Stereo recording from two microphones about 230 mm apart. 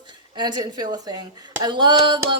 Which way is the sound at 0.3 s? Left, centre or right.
Centre.